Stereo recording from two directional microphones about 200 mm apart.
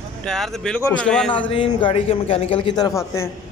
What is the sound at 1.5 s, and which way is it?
A man's voice, 25° left (ahead or behind).